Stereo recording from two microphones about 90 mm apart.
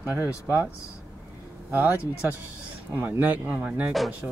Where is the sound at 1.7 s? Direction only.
20° right (ahead or behind).